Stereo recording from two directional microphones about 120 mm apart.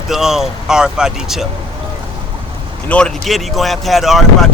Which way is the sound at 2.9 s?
5° left (ahead or behind).